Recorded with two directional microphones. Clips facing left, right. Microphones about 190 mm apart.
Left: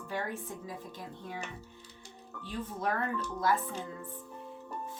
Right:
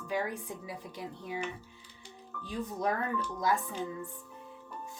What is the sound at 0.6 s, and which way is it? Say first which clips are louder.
Speech: right 1 dB; 10° right (ahead or behind).